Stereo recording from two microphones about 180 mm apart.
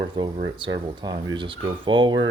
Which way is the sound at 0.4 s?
25° right (ahead or behind).